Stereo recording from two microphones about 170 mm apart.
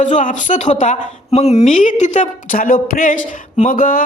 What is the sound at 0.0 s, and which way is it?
Speech, 50° left (ahead or behind).